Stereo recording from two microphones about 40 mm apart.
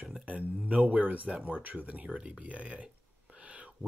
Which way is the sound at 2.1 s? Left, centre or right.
Right.